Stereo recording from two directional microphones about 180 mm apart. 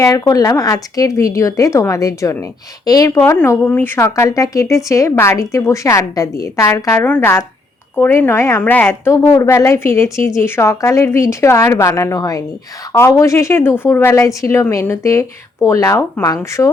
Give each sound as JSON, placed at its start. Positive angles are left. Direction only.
{"t": 0.0, "sound": "speech", "side_deg": 20}